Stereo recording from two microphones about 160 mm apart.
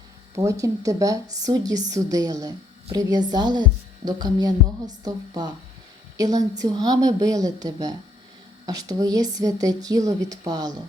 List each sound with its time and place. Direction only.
0.3 s a woman's voice: 20° right (ahead or behind)